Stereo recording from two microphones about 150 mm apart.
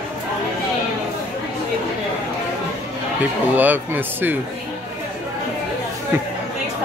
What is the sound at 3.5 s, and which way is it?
Speech, 10° right (ahead or behind).